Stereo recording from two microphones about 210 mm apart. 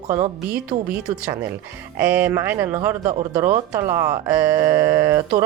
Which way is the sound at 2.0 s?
5° right (ahead or behind).